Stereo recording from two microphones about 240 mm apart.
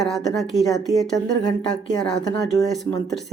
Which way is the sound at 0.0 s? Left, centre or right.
Centre.